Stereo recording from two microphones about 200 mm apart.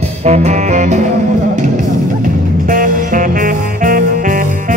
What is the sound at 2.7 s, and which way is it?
Music, 45° right (ahead or behind).